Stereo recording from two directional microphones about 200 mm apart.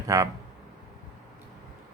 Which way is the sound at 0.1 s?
15° right (ahead or behind).